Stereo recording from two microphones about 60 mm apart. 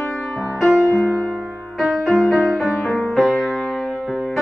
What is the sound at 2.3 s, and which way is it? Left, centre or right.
Music, centre.